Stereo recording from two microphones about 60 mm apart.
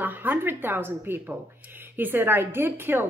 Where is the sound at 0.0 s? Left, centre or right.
Right.